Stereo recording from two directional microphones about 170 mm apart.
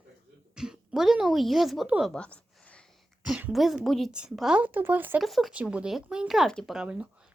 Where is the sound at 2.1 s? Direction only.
5° left (ahead or behind); by 5.2 s 10° right (ahead or behind).